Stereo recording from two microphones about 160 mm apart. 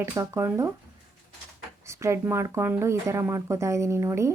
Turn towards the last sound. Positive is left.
turn(degrees=-20)  # may be behind; listen again after turning